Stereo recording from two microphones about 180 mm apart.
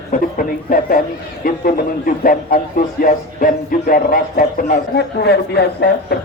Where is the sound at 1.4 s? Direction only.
50° left (ahead or behind).